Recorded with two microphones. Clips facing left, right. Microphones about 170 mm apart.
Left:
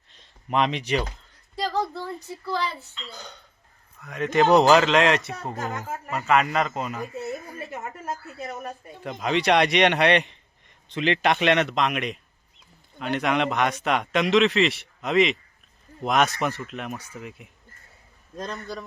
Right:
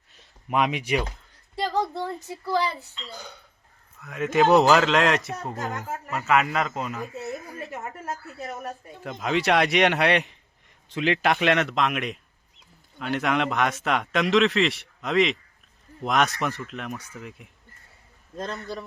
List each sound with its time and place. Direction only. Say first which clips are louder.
0.1 s a child's voice: left 1 dB; 10° right (ahead or behind)
7.7 s a woman's voice: left 2 dB; 10° left (ahead or behind)
9.0 s a man's voice: left 1 dB; centre (ahead or behind)